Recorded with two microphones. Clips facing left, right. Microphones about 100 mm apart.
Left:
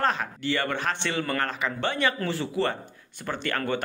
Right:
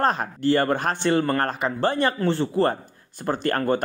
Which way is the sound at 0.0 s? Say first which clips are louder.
Right 5 dB; 40° right (ahead or behind).